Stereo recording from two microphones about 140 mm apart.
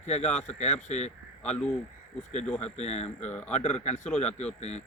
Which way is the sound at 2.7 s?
50° left (ahead or behind).